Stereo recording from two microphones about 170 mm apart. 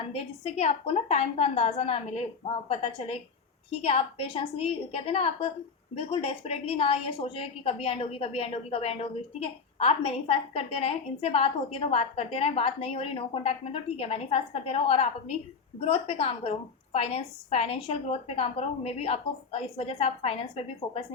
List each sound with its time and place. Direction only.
0.1 s a woman's voice: 40° left (ahead or behind)